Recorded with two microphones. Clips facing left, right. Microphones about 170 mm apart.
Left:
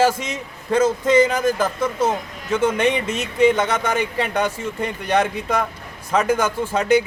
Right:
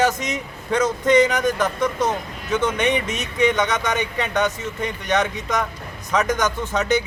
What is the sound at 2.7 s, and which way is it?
Speech, 30° left (ahead or behind).